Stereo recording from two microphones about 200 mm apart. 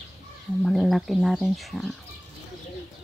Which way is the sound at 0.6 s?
Centre (ahead or behind).